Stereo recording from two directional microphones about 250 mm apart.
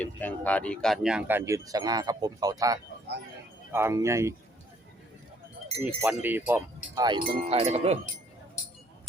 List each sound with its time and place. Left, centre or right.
0.0 s speech: centre
5.8 s speech: centre; by 7.9 s right